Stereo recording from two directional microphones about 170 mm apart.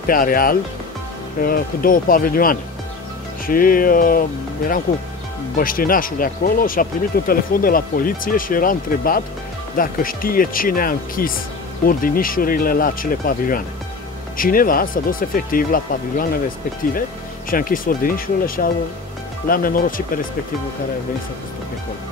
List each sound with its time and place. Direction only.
0.0 s speech: 55° left (ahead or behind)
17.5 s speech: 55° left (ahead or behind)